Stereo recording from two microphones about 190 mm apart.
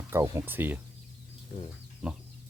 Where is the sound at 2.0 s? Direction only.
5° right (ahead or behind).